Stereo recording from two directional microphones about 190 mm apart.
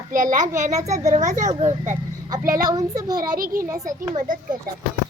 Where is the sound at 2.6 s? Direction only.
20° right (ahead or behind).